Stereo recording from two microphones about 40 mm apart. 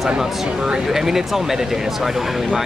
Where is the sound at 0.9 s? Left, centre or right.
Centre.